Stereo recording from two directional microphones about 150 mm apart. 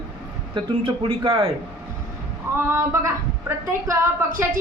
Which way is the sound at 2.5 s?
15° right (ahead or behind).